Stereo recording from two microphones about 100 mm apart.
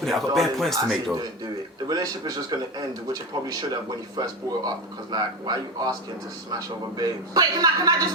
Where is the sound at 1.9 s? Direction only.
40° right (ahead or behind).